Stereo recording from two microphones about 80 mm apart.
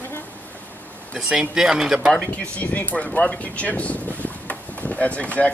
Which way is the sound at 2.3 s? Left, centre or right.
Centre.